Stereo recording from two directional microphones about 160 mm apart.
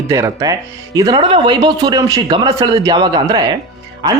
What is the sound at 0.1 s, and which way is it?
Speech, 20° right (ahead or behind).